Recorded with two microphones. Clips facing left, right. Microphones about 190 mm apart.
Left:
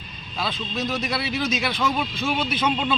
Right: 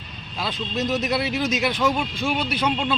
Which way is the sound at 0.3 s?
15° right (ahead or behind).